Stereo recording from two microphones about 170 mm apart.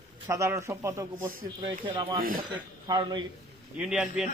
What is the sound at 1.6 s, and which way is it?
Speech, 30° right (ahead or behind).